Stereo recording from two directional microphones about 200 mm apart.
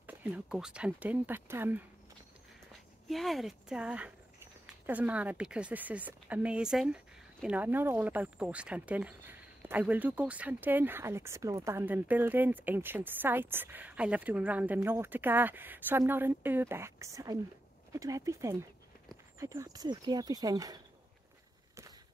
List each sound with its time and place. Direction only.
0.0 s speech: 10° right (ahead or behind)
3.1 s speech: centre (ahead or behind); by 20.8 s 20° right (ahead or behind)